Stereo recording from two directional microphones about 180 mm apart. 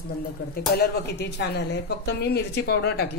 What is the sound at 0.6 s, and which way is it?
A woman's voice, 60° left (ahead or behind).